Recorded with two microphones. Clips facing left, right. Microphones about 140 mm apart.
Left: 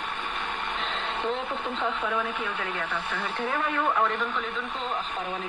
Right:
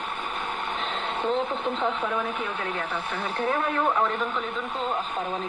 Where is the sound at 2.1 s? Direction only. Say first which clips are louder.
Right 1 dB; 10° right (ahead or behind).